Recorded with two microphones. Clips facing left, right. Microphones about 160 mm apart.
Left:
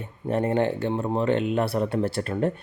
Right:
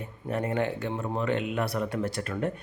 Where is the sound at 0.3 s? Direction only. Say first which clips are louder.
Left 5 dB; 30° left (ahead or behind).